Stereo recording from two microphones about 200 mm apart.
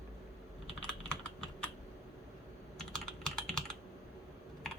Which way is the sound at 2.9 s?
5° left (ahead or behind).